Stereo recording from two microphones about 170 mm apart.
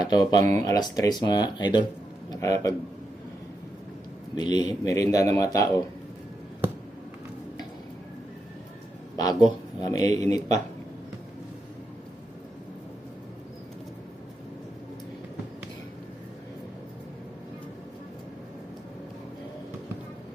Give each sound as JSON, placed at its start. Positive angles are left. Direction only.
{"t": 0.0, "sound": "a man's voice", "side_deg": 25}
{"t": 4.4, "sound": "a man's voice", "side_deg": 25}
{"t": 9.1, "sound": "a man's voice", "side_deg": 20}